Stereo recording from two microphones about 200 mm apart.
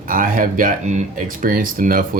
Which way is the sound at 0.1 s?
45° right (ahead or behind).